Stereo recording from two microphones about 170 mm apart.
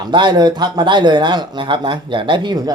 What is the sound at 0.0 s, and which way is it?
Speech, 25° right (ahead or behind).